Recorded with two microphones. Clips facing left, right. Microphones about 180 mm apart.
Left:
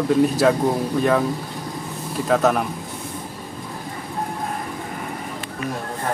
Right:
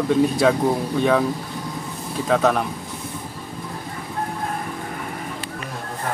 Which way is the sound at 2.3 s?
Centre (ahead or behind).